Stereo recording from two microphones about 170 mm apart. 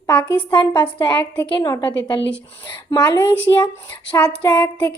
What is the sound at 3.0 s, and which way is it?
A woman's voice, 15° left (ahead or behind).